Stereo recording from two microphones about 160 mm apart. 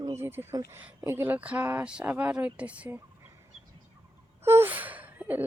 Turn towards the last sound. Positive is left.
turn(degrees=-10)  # may be behind; listen again after turning